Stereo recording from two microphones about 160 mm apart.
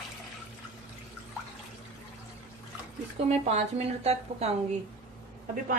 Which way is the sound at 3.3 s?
45° right (ahead or behind).